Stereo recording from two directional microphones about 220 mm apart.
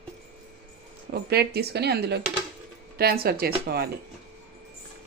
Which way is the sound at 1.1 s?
45° right (ahead or behind).